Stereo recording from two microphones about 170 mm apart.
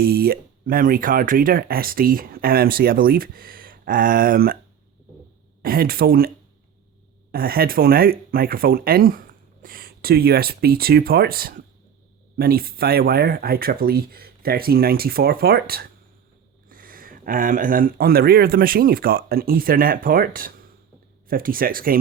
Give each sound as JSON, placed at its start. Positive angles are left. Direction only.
{"t": 0.0, "sound": "speech", "side_deg": -65}
{"t": 5.6, "sound": "speech", "side_deg": -60}